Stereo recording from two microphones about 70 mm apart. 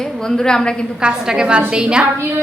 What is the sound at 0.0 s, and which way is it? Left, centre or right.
Speech, centre.